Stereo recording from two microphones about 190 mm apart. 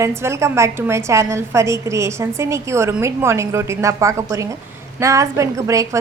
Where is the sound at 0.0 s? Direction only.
15° right (ahead or behind).